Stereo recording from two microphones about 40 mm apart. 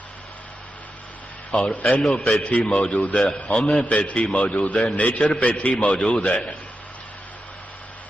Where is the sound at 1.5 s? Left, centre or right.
Left.